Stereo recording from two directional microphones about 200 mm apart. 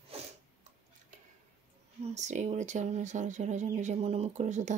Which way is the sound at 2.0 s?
35° right (ahead or behind).